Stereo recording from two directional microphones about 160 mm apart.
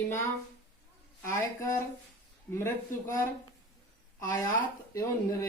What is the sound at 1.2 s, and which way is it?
Speech, 15° left (ahead or behind).